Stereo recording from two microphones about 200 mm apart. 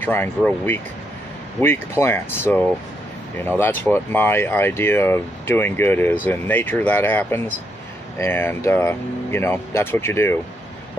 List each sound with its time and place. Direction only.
0.0 s speech: 10° left (ahead or behind)